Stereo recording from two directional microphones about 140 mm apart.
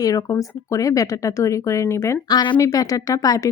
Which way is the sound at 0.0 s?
25° left (ahead or behind).